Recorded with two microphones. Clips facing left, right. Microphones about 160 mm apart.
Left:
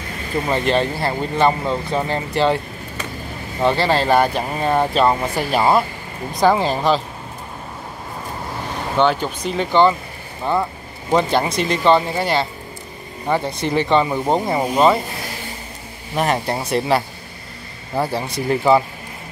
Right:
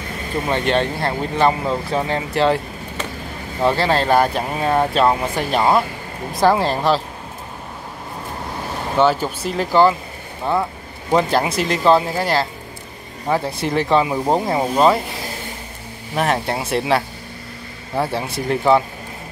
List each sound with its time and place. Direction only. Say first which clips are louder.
0.5 s speech: even; centre (ahead or behind)
3.6 s speech: even; centre (ahead or behind)
8.9 s speech: right 1 dB; 5° right (ahead or behind)
16.2 s speech: even; centre (ahead or behind)